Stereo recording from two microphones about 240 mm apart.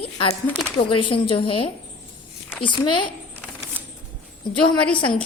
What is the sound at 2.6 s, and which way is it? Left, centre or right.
Speech, centre.